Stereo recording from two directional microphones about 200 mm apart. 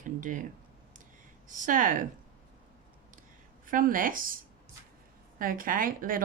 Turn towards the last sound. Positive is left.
turn(degrees=-45)  # may be behind; listen again after turning